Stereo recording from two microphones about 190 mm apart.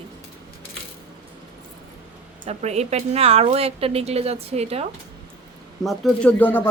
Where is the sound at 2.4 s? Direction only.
35° right (ahead or behind).